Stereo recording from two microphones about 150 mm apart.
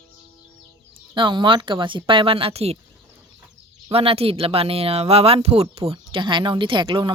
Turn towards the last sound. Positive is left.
turn(degrees=-30)  # may be behind; listen again after turning